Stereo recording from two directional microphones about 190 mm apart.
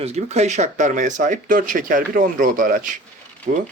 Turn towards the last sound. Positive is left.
turn(degrees=-40)  # may be behind; listen again after turning